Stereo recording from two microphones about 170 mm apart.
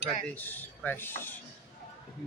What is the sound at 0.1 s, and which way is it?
Speech, 10° left (ahead or behind).